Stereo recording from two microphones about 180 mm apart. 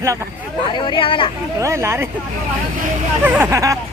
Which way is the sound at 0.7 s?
25° left (ahead or behind).